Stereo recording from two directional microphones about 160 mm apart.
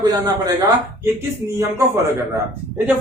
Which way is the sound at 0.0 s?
25° right (ahead or behind).